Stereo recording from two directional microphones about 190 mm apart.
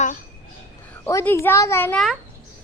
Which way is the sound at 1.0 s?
10° left (ahead or behind).